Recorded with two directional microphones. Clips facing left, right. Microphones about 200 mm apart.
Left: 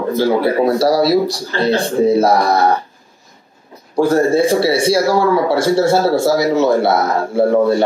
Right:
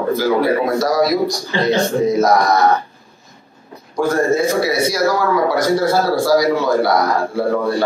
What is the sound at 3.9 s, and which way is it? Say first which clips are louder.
A man's voice: left 3 dB; 30° left (ahead or behind).